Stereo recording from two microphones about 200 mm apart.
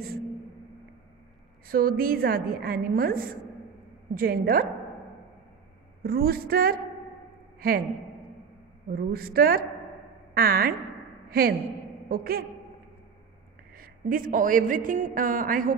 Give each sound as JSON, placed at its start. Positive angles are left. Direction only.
{"t": 1.7, "sound": "a woman's voice", "side_deg": -45}
{"t": 6.0, "sound": "a woman's voice", "side_deg": -50}
{"t": 8.8, "sound": "a woman's voice", "side_deg": -50}
{"t": 13.7, "sound": "a woman's voice", "side_deg": -45}